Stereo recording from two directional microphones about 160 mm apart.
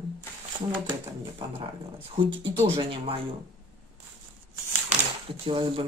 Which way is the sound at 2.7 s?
35° right (ahead or behind).